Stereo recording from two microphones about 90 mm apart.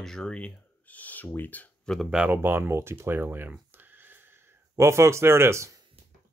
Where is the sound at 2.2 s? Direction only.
25° right (ahead or behind).